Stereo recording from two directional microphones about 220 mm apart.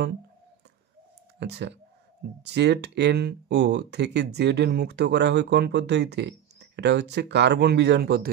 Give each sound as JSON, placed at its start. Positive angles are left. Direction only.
{"t": 1.4, "sound": "speech", "side_deg": -50}